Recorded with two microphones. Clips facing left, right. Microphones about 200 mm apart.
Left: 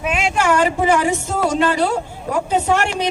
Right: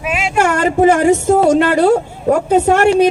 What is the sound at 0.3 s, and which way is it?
A woman's voice, 50° right (ahead or behind).